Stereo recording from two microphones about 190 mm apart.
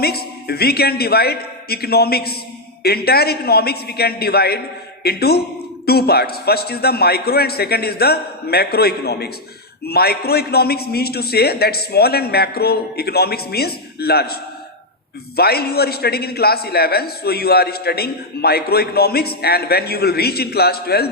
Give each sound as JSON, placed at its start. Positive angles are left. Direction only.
{"t": 0.0, "sound": "a man's voice", "side_deg": 55}
{"t": 15.4, "sound": "a man's voice", "side_deg": 55}